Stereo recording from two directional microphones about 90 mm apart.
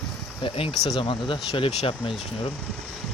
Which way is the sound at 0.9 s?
70° left (ahead or behind).